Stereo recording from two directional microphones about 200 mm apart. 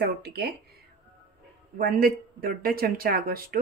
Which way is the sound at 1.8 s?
45° right (ahead or behind).